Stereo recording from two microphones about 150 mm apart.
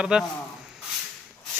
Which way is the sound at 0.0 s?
5° right (ahead or behind).